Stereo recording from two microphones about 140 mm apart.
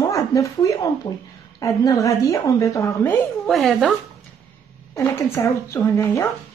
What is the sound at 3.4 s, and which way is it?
Speech, centre (ahead or behind).